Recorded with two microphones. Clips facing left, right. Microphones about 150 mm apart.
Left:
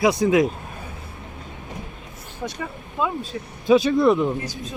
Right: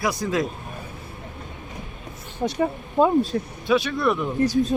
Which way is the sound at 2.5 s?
40° right (ahead or behind).